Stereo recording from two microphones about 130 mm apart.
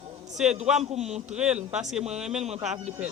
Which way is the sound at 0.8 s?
55° right (ahead or behind).